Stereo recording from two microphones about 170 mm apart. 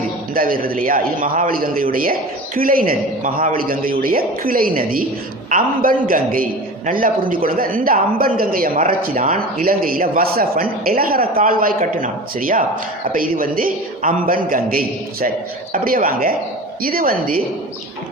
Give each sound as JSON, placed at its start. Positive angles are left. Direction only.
{"t": 0.3, "sound": "a man's voice", "side_deg": -55}